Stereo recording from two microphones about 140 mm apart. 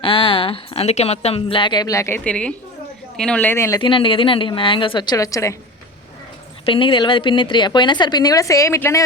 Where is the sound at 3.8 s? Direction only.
35° left (ahead or behind).